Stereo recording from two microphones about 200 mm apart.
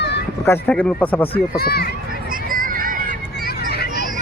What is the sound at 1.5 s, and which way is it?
Speech, 50° left (ahead or behind).